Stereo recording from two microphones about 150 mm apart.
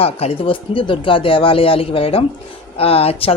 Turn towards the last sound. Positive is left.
turn(degrees=40)  # may be behind; listen again after turning